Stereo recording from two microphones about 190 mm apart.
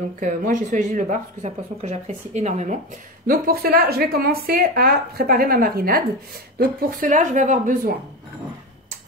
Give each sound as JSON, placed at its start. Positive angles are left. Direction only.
{"t": 0.2, "sound": "speech", "side_deg": -45}
{"t": 3.3, "sound": "speech", "side_deg": -55}